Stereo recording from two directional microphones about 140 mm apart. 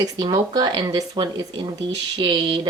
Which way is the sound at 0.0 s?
25° right (ahead or behind).